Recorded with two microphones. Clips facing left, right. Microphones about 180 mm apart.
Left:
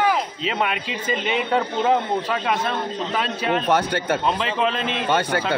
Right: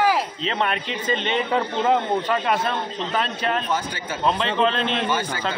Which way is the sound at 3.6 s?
65° left (ahead or behind).